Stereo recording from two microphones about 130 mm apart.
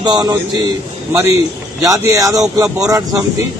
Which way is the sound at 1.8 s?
25° right (ahead or behind).